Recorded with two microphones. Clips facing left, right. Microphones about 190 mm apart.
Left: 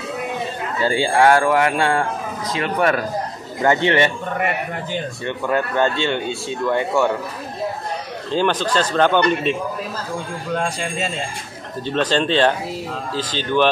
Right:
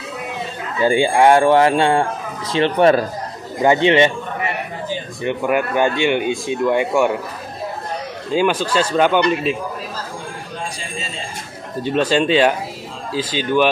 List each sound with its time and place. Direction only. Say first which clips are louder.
0.7 s speech: right 3 dB; 15° right (ahead or behind)
4.4 s a sound: left 4 dB; 60° left (ahead or behind)
5.2 s speech: right 4 dB; 15° right (ahead or behind)
8.3 s speech: right 2 dB; 10° right (ahead or behind)
10.5 s speech: left 9 dB; 60° left (ahead or behind)
11.8 s speech: right 3 dB; 10° right (ahead or behind)